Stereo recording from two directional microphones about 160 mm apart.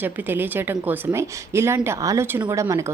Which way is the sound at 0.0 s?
10° right (ahead or behind).